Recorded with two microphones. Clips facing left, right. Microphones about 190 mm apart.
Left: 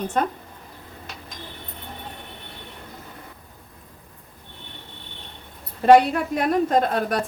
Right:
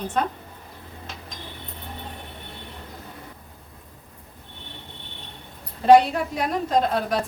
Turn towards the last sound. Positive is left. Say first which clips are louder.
# left 1 dB
turn(degrees=55)  # may be behind; listen again after turning